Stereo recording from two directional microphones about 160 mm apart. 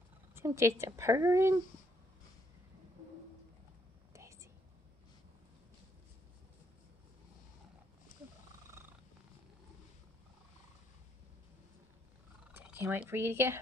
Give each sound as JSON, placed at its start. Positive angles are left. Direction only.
{"t": 0.3, "sound": "a woman's voice", "side_deg": -15}
{"t": 4.1, "sound": "whispering", "side_deg": -20}
{"t": 8.8, "sound": "purr", "side_deg": -15}
{"t": 12.5, "sound": "speech", "side_deg": -10}